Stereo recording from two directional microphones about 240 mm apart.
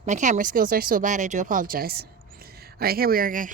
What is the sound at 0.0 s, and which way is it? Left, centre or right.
Speech, right.